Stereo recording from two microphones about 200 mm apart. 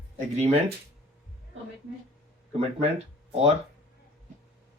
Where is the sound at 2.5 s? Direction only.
30° right (ahead or behind).